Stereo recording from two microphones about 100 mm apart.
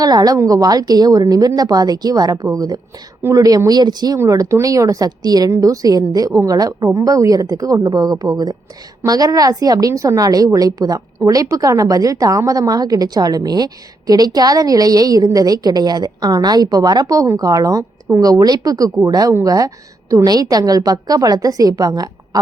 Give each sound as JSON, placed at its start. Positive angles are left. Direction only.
{"t": 0.0, "sound": "a woman's voice", "side_deg": -40}
{"t": 4.2, "sound": "a woman's voice", "side_deg": -30}